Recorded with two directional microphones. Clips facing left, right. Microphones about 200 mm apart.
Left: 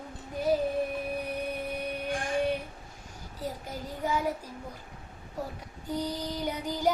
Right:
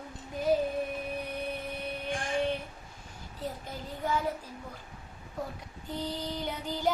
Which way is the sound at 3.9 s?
10° left (ahead or behind).